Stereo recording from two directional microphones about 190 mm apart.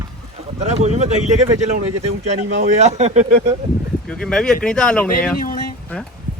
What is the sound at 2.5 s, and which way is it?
Speech, 35° right (ahead or behind).